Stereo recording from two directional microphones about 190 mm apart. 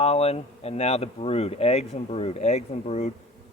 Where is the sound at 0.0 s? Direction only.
35° left (ahead or behind).